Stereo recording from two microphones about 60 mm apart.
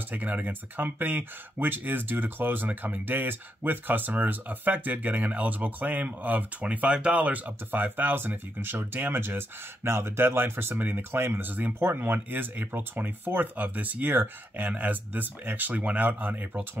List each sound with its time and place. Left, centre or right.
0.1 s speech: right